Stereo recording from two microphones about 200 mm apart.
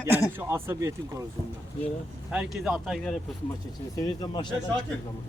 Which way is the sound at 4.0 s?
20° left (ahead or behind).